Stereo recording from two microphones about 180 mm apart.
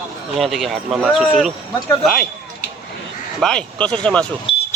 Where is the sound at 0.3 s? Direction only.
Centre (ahead or behind).